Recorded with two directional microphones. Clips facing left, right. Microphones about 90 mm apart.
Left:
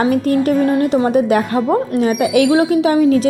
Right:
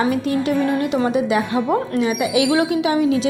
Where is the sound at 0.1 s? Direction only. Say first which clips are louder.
Left 5 dB; 50° left (ahead or behind).